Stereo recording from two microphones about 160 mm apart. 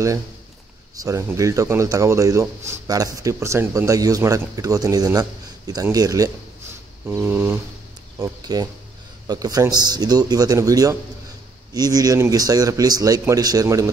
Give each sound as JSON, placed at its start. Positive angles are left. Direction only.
{"t": 0.9, "sound": "speech", "side_deg": -20}
{"t": 8.2, "sound": "speech", "side_deg": -25}